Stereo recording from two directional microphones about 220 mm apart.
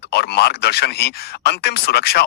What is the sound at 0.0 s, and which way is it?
Speech, 50° left (ahead or behind).